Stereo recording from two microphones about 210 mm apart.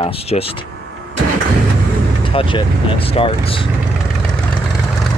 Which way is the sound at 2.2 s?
25° left (ahead or behind).